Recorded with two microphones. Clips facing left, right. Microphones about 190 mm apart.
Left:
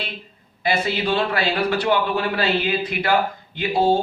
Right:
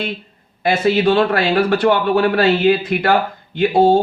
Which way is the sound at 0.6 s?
50° right (ahead or behind).